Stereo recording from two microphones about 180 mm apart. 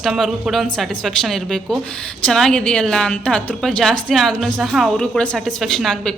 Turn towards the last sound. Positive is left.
turn(degrees=0)  # may be behind; listen again after turning